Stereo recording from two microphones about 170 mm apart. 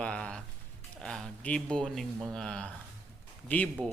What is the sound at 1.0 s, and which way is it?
Speech, 5° left (ahead or behind).